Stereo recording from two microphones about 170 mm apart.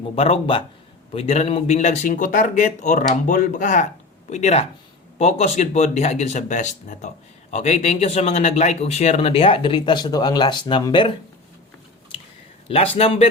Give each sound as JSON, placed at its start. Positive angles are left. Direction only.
{"t": 0.0, "sound": "speech", "side_deg": 35}
{"t": 12.6, "sound": "speech", "side_deg": 35}